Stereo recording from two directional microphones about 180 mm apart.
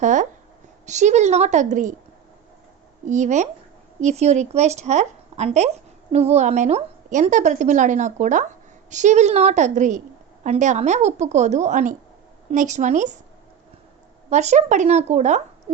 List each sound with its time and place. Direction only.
0.0 s a woman's voice: 45° right (ahead or behind)
3.1 s a woman's voice: 40° right (ahead or behind)
14.3 s a woman's voice: 40° right (ahead or behind)